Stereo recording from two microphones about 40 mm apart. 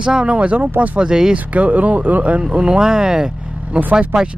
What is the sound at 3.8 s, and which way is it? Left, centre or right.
Speech, right.